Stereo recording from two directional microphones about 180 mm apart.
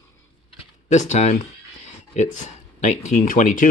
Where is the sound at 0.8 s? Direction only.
40° left (ahead or behind).